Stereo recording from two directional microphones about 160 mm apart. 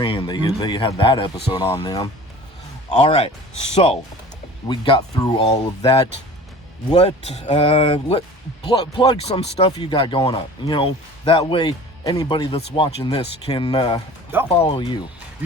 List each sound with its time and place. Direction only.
0.0 s speech: 30° left (ahead or behind)
2.9 s speech: 40° left (ahead or behind)
4.7 s speech: 30° left (ahead or behind)
8.6 s speech: 25° left (ahead or behind)
9.2 s speech: 40° left (ahead or behind)
14.3 s speech: 15° right (ahead or behind)
14.7 s speech: 30° left (ahead or behind)